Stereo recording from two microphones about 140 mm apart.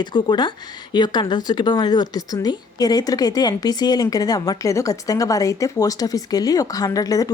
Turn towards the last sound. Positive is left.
turn(degrees=25)  # may be behind; listen again after turning